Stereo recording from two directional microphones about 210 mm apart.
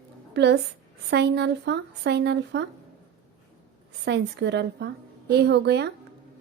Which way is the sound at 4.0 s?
55° right (ahead or behind).